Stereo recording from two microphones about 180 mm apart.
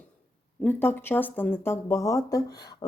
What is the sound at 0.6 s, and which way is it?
Speech, 10° left (ahead or behind).